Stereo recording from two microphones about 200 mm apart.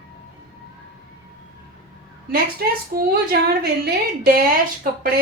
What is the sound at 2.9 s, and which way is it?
A woman's voice, 50° right (ahead or behind).